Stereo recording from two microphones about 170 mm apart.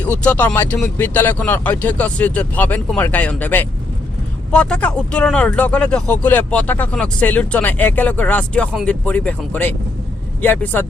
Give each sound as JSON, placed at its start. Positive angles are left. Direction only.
{"t": 0.0, "sound": "speech", "side_deg": 10}